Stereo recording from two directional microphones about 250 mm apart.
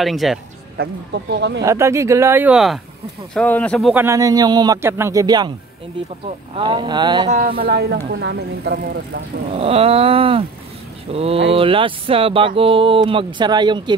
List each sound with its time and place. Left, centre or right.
0.0 s speech: centre
0.7 s speech: right
1.6 s speech: centre
3.9 s speech: centre
6.5 s speech: right
7.3 s speech: right
9.5 s speech: right